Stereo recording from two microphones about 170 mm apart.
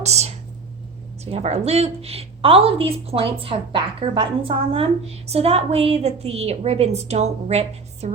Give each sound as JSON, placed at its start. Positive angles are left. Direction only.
{"t": 0.0, "sound": "a woman's voice", "side_deg": -40}